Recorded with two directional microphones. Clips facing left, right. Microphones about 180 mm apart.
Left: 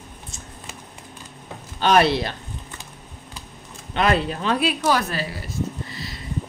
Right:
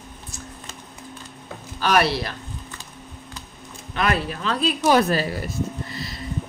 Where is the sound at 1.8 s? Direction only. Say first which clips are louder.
Left 3 dB; 25° left (ahead or behind).